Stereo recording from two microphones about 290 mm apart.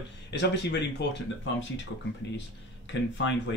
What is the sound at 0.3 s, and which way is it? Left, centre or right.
Speech, left.